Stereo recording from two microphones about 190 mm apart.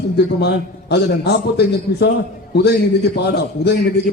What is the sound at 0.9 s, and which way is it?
A man's voice, 60° left (ahead or behind).